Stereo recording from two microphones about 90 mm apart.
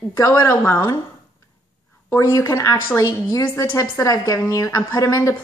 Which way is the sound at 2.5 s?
40° left (ahead or behind).